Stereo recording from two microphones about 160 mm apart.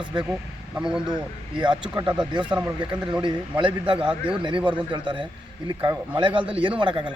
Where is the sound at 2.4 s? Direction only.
5° right (ahead or behind).